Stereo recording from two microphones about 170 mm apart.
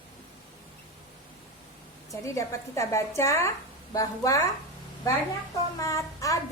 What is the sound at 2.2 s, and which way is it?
A woman's voice, 20° left (ahead or behind).